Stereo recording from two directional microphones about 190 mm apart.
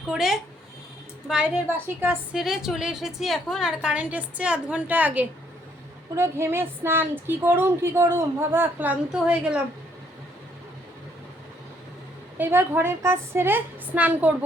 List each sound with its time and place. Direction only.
0.1 s a woman's voice: centre (ahead or behind)
12.4 s a woman's voice: 10° right (ahead or behind)